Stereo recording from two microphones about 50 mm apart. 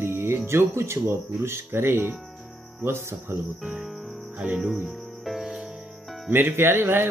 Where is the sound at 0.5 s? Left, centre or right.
Right.